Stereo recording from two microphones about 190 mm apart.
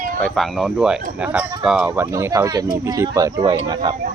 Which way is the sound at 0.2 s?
Centre (ahead or behind).